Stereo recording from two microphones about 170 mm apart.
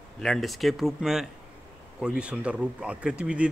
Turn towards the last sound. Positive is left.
turn(degrees=-5)  # may be behind; listen again after turning